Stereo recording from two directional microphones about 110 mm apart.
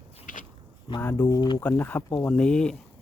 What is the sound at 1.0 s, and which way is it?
Speech, 20° left (ahead or behind).